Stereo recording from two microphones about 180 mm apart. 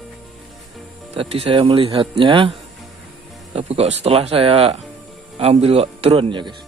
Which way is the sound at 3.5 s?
35° right (ahead or behind).